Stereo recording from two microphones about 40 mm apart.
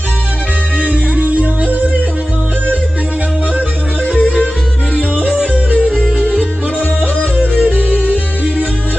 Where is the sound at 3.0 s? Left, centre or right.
Right.